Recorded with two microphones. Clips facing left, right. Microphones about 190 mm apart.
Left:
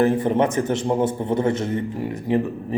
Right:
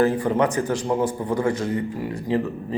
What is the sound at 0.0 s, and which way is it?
A man's voice, 20° left (ahead or behind).